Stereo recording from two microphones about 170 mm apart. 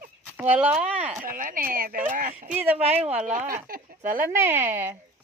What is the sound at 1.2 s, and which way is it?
Speech, 55° right (ahead or behind).